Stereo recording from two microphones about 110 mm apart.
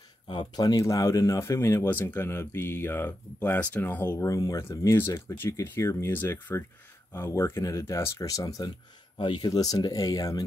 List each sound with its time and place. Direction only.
0.3 s speech: 40° left (ahead or behind); by 4.3 s 20° left (ahead or behind)
4.3 s speech: 30° left (ahead or behind)
9.2 s speech: 45° left (ahead or behind)
9.5 s speech: 35° left (ahead or behind)